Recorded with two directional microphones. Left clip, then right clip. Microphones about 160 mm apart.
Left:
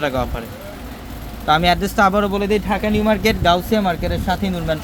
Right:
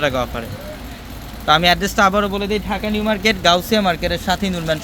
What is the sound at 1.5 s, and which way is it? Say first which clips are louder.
Speech: right 1 dB; 10° right (ahead or behind).